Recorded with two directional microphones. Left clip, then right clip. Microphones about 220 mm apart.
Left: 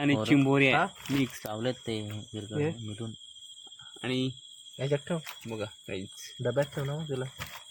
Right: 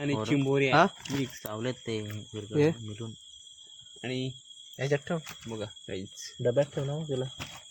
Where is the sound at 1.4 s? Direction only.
Centre (ahead or behind).